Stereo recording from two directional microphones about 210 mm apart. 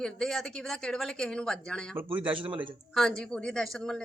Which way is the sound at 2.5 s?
25° right (ahead or behind).